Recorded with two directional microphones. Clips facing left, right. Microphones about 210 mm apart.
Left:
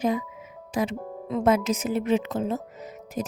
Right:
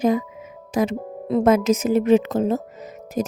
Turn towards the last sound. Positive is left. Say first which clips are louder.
# right 6 dB
turn(degrees=-40)  # may be behind; listen again after turning